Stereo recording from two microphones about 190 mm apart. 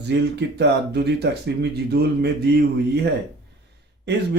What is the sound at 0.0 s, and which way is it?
Speech, 65° right (ahead or behind).